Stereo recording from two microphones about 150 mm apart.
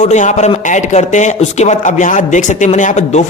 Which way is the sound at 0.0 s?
55° left (ahead or behind).